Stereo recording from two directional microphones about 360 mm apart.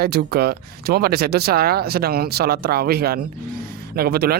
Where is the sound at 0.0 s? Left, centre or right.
Right.